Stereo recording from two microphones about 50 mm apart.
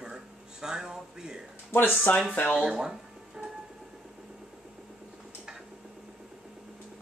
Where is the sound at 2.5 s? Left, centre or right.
Centre.